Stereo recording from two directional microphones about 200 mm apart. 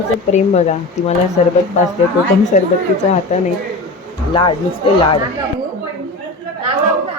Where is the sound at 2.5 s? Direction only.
40° left (ahead or behind).